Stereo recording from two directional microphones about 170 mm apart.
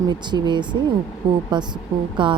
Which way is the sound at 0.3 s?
25° right (ahead or behind).